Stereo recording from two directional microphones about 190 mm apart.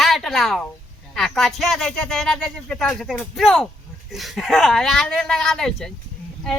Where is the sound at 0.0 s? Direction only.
Centre (ahead or behind).